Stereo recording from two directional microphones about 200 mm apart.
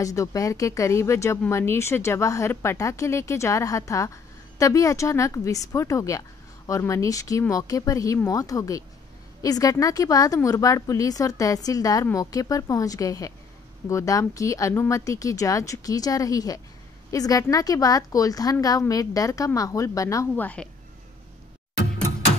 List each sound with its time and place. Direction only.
0.0 s speech: 15° left (ahead or behind)